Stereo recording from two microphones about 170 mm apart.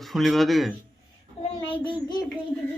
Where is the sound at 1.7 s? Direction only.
30° left (ahead or behind).